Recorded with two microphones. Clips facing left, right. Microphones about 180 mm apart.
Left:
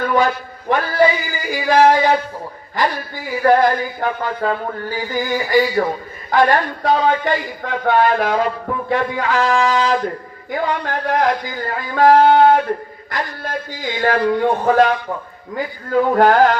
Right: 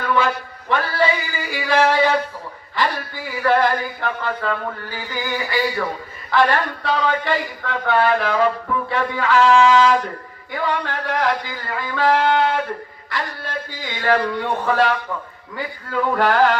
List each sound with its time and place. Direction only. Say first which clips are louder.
0.7 s speech: left 4 dB; 45° left (ahead or behind)
3.4 s speech: left 4 dB; 45° left (ahead or behind)